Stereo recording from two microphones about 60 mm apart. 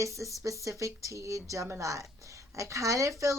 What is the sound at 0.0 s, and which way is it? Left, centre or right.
A woman's voice, right.